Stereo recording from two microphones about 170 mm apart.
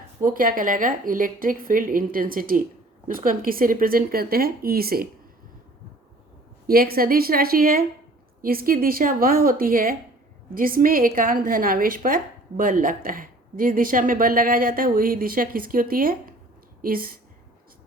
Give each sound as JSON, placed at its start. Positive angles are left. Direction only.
{"t": 0.2, "sound": "a woman's voice", "side_deg": -55}
{"t": 6.7, "sound": "a woman's voice", "side_deg": -60}